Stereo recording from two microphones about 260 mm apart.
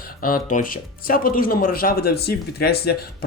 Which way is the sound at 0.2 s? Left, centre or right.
Left.